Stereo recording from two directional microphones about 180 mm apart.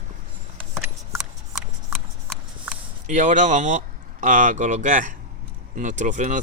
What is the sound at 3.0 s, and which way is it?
Speech, 45° right (ahead or behind).